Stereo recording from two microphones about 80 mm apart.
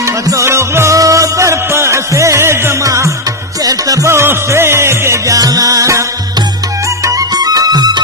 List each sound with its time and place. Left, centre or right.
0.3 s music: right
3.6 s music: right
4.1 s music: right
5.4 s music: right
7.3 s music: right